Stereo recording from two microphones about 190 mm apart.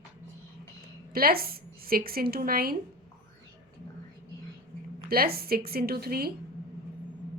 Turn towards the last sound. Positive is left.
turn(degrees=-55)  # may be behind; listen again after turning